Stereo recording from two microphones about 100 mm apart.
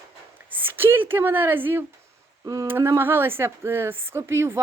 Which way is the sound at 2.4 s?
35° right (ahead or behind).